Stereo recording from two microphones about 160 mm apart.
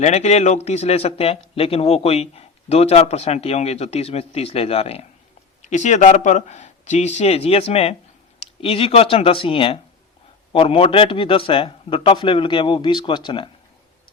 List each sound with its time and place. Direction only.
0.0 s speech: 45° left (ahead or behind)